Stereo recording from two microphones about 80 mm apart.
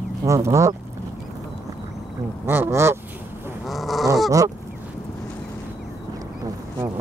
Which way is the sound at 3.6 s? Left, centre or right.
Centre.